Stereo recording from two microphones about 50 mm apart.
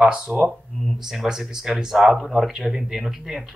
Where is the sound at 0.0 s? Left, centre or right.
Centre.